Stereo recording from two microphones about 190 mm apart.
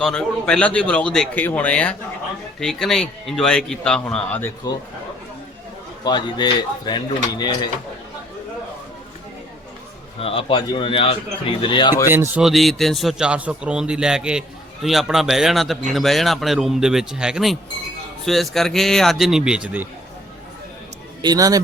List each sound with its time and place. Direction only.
0.0 s a man's voice: 5° left (ahead or behind)
6.1 s speech: 25° left (ahead or behind)
10.2 s speech: 30° left (ahead or behind)
12.1 s a man's voice: 10° right (ahead or behind)
21.2 s speech: 20° right (ahead or behind)